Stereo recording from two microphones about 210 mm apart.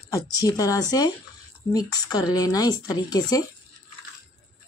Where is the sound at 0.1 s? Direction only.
15° left (ahead or behind).